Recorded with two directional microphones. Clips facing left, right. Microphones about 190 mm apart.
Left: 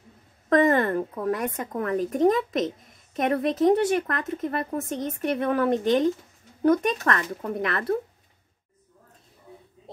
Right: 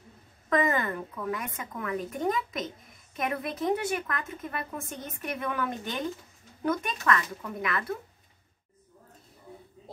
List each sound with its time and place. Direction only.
0.5 s speech: 40° left (ahead or behind)